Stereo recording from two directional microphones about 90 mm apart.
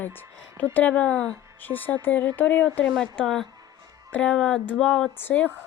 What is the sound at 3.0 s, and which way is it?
Speech, 10° left (ahead or behind).